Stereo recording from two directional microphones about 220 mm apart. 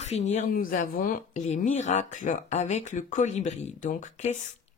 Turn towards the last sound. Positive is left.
turn(degrees=35)  # may be behind; listen again after turning